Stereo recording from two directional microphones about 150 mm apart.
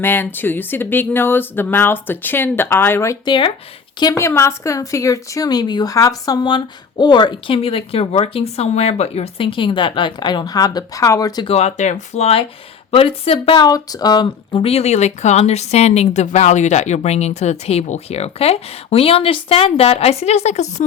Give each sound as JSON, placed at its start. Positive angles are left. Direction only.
{"t": 0.0, "sound": "speech", "side_deg": 15}
{"t": 11.4, "sound": "speech", "side_deg": 45}
{"t": 13.7, "sound": "speech", "side_deg": 25}